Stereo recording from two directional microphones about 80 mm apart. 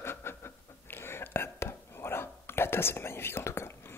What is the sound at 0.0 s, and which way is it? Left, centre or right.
Whispering, left.